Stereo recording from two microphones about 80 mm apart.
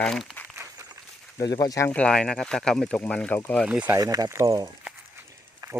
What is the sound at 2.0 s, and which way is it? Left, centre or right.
Speech, centre.